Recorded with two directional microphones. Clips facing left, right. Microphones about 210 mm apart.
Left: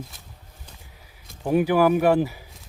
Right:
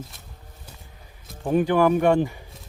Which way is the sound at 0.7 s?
5° right (ahead or behind).